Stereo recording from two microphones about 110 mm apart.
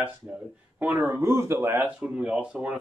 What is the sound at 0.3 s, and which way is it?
Speech, 15° right (ahead or behind).